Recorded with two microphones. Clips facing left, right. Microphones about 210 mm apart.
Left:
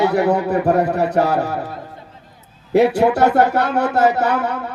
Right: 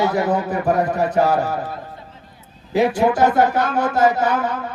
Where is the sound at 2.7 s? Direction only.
65° left (ahead or behind).